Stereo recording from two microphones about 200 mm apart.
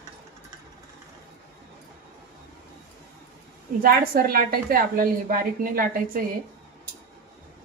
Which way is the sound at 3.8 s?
45° right (ahead or behind).